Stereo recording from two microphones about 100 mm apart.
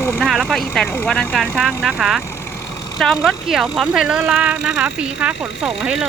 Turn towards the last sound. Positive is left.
turn(degrees=-5)  # may be behind; listen again after turning